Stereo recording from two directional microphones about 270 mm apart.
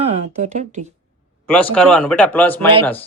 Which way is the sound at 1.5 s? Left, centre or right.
Centre.